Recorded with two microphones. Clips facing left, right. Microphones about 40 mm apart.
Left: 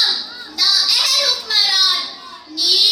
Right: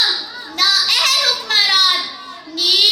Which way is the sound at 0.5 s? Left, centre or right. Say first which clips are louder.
Right 2 dB; right.